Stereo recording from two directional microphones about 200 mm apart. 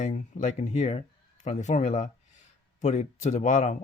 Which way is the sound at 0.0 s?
40° left (ahead or behind).